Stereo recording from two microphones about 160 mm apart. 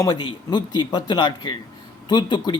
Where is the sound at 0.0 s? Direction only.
25° left (ahead or behind).